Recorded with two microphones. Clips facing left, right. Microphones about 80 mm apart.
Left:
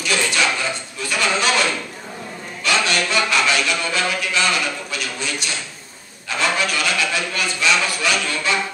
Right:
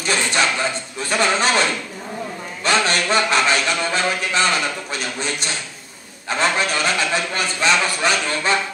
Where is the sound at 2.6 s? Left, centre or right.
Right.